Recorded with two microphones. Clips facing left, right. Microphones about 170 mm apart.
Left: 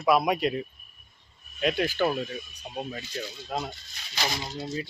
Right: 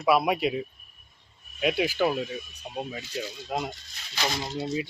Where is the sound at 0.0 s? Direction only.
5° right (ahead or behind).